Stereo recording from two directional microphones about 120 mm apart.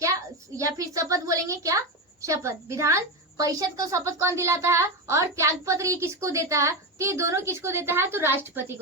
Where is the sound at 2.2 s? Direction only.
25° right (ahead or behind).